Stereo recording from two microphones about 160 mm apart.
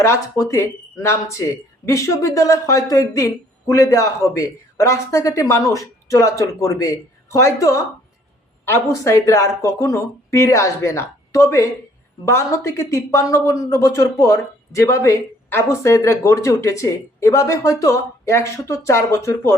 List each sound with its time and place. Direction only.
0.0 s speech: 20° left (ahead or behind)